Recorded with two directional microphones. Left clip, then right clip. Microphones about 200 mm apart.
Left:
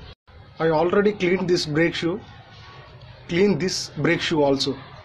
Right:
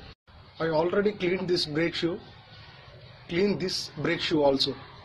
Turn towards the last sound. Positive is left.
turn(degrees=10)  # may be behind; listen again after turning